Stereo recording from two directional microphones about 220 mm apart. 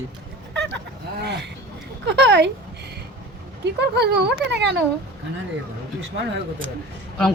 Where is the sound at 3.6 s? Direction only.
50° right (ahead or behind).